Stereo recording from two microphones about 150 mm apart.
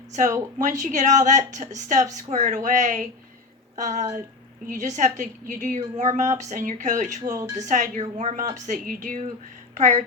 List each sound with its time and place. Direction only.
0.1 s a woman's voice: 55° right (ahead or behind)
9.7 s a woman's voice: 50° right (ahead or behind)